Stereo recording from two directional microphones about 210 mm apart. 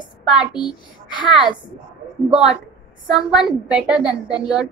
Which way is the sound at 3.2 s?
Centre (ahead or behind).